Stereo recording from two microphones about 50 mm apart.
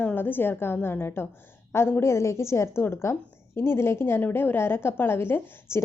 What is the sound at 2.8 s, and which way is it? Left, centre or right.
A woman's voice, left.